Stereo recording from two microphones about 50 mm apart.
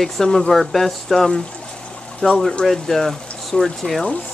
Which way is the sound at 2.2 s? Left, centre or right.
Centre.